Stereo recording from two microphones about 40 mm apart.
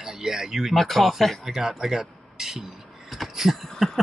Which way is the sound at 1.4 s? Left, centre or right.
Centre.